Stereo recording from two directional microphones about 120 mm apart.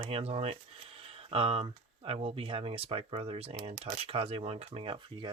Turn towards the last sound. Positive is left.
turn(degrees=-45)  # may be behind; listen again after turning